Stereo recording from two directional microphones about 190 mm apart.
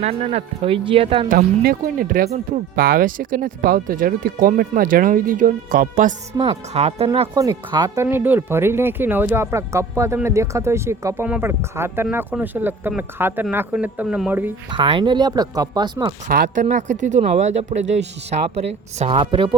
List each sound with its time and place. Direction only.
0.0 s speech: 35° right (ahead or behind)
1.3 s speech: 50° right (ahead or behind)
6.5 s speech: 35° right (ahead or behind)
7.3 s speech: 20° right (ahead or behind)
8.0 s speech: 10° right (ahead or behind)
14.7 s speech: 25° right (ahead or behind)
16.3 s speech: 40° right (ahead or behind)